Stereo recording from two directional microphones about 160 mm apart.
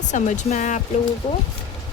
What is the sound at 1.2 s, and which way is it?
Speech, 30° left (ahead or behind).